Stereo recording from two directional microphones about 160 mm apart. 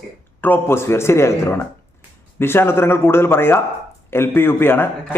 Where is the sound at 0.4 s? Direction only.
15° left (ahead or behind).